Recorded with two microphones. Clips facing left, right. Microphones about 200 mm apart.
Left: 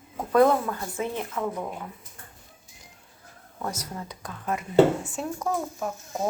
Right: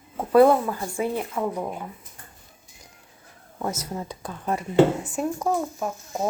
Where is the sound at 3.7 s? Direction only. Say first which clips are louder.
Right 4 dB; 30° right (ahead or behind).